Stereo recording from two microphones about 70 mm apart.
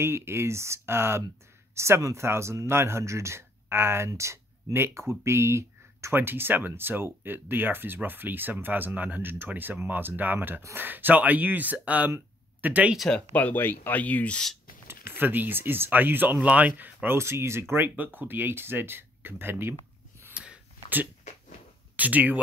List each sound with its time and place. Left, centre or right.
0.0 s speech: right
6.1 s speech: right
13.1 s speech: left
14.9 s speech: right
21.9 s speech: right